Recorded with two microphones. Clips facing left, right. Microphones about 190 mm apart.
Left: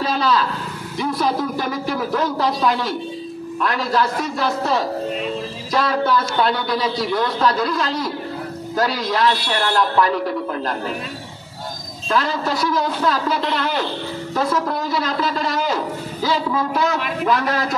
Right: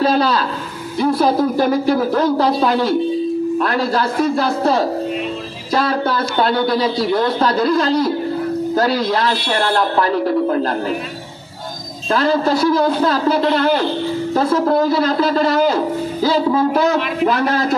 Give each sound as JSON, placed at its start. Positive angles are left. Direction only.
{"t": 0.0, "sound": "a sound", "side_deg": -35}
{"t": 0.9, "sound": "speech", "side_deg": -35}
{"t": 12.1, "sound": "speech", "side_deg": -35}
{"t": 13.4, "sound": "a man's voice", "side_deg": -45}
{"t": 14.3, "sound": "a man's voice", "side_deg": -30}